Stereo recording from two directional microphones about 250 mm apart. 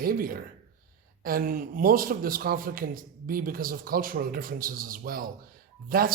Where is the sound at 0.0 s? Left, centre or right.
Right.